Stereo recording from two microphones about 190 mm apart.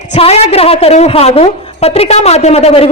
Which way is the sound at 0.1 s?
35° left (ahead or behind).